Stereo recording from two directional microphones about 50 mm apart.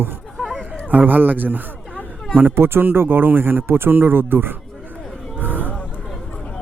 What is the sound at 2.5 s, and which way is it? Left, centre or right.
Speech, right.